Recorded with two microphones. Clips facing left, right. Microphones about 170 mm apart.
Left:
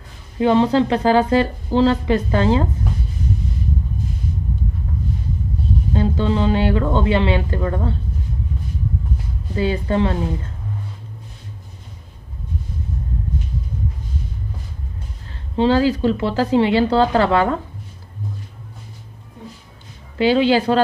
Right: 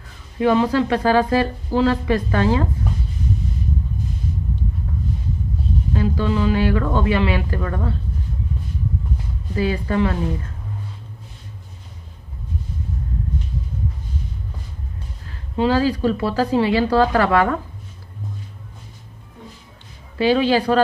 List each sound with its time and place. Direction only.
0.4 s a woman's voice: 25° left (ahead or behind)
5.9 s a woman's voice: 25° left (ahead or behind)
9.6 s a woman's voice: 25° left (ahead or behind)
15.5 s a woman's voice: 25° left (ahead or behind)
20.3 s a woman's voice: 25° left (ahead or behind)